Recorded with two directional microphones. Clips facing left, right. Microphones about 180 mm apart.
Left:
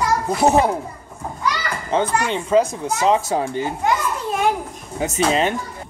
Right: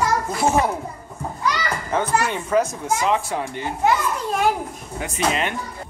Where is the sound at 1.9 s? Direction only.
30° left (ahead or behind).